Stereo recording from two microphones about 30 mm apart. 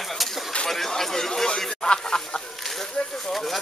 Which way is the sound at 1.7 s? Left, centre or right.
Left.